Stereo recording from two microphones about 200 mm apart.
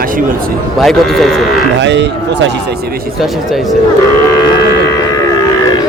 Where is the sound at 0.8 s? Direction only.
Centre (ahead or behind).